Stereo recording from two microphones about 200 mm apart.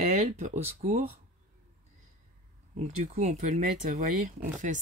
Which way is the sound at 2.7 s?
35° right (ahead or behind).